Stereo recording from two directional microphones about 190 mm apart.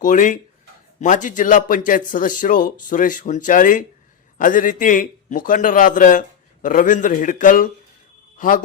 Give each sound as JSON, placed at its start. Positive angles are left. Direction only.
{"t": 0.0, "sound": "a man's voice", "side_deg": 40}